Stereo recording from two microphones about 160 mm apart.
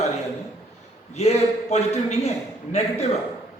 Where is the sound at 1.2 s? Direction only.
45° left (ahead or behind).